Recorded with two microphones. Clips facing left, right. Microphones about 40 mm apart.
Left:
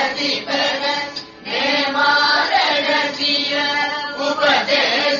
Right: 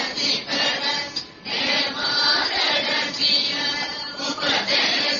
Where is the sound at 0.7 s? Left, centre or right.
Centre.